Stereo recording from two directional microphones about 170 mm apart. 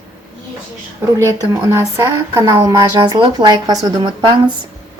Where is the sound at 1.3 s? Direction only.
20° right (ahead or behind).